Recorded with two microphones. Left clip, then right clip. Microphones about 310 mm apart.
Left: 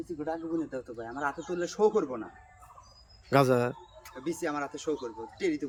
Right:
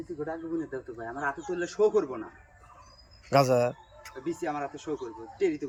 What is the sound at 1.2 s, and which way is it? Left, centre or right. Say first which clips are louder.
Speech: right 1 dB; centre.